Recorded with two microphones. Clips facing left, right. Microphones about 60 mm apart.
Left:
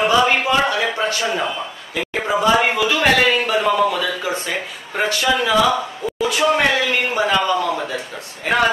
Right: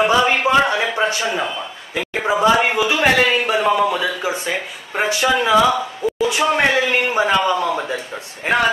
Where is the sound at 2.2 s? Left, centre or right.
Centre.